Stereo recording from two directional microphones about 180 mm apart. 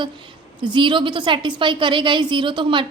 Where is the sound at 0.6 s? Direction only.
25° right (ahead or behind).